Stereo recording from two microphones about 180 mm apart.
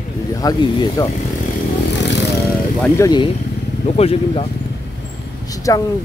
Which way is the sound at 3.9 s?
35° left (ahead or behind).